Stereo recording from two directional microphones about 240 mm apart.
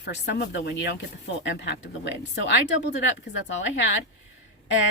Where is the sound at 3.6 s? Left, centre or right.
Left.